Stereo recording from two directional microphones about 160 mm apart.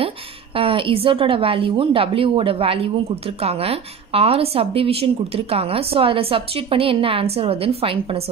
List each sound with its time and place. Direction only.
0.6 s a woman's voice: 35° right (ahead or behind)